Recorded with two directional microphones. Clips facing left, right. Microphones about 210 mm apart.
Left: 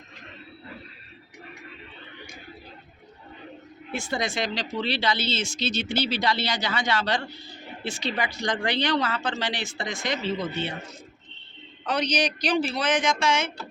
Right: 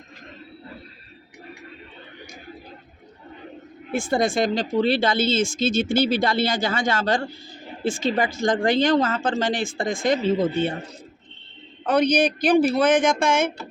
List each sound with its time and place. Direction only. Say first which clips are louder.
3.9 s speech: right 7 dB; 50° right (ahead or behind)
10.3 s a man's voice: right 8 dB; 30° right (ahead or behind)
11.9 s speech: right 7 dB; 55° right (ahead or behind)